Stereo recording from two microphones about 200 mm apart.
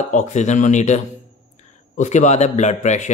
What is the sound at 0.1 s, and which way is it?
Speech, 35° left (ahead or behind).